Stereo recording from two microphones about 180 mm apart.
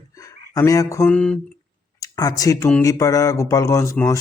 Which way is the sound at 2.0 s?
20° left (ahead or behind).